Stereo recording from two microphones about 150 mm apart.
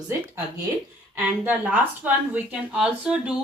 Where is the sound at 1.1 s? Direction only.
10° right (ahead or behind).